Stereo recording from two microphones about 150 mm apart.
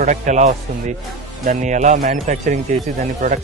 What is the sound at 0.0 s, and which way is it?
Speech, 55° right (ahead or behind).